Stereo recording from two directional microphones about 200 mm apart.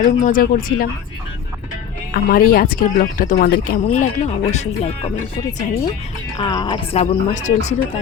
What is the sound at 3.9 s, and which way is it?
Speech, 35° left (ahead or behind).